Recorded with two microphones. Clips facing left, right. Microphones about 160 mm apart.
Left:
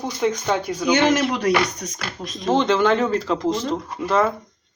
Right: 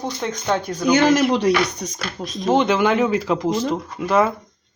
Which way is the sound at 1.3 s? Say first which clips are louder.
Right 2 dB; 30° right (ahead or behind).